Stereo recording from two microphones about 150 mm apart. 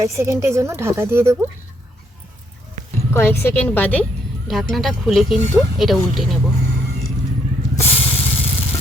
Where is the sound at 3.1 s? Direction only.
15° left (ahead or behind); by 6.2 s centre (ahead or behind).